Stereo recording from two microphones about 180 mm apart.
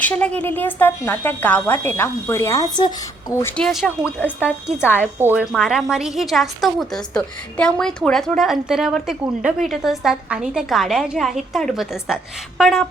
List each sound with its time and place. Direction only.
0.0 s speech: 5° left (ahead or behind)
3.6 s a woman's voice: centre (ahead or behind)